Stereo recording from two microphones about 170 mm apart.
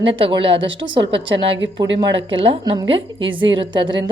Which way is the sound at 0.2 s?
30° right (ahead or behind).